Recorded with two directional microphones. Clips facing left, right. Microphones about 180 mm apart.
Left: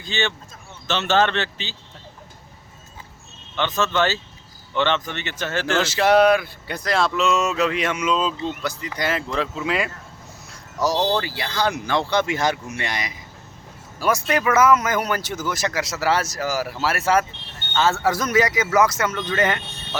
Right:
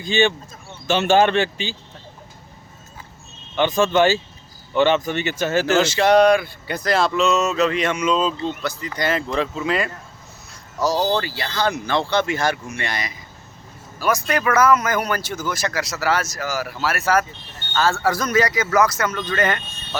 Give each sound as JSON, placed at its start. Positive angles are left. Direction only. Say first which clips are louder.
{"t": 0.0, "sound": "speech", "louder": "right 7 dB", "side_deg": -15}
{"t": 3.5, "sound": "speech", "louder": "right 5 dB", "side_deg": -15}
{"t": 5.8, "sound": "speech", "louder": "even", "side_deg": 5}
{"t": 8.4, "sound": "speech", "louder": "right 1 dB", "side_deg": 15}
{"t": 10.9, "sound": "speech", "louder": "right 1 dB", "side_deg": -5}
{"t": 11.2, "sound": "speech", "louder": "right 1 dB", "side_deg": 15}